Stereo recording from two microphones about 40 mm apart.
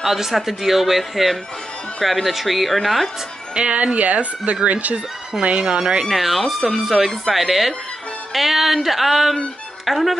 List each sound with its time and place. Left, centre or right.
0.0 s speech: centre
3.5 s a woman's voice: right
6.0 s speech: centre